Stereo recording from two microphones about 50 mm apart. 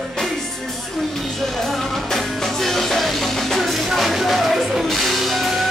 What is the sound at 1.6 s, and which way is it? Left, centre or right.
Music, centre.